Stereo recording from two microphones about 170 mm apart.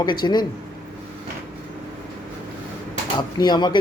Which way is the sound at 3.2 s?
25° left (ahead or behind).